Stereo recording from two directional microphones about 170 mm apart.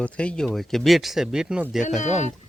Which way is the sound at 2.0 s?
45° left (ahead or behind).